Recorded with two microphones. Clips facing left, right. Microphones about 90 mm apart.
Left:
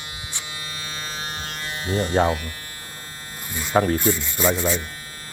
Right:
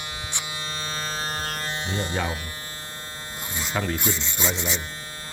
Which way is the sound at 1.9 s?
25° right (ahead or behind).